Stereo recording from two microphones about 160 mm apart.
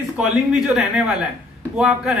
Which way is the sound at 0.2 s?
5° right (ahead or behind).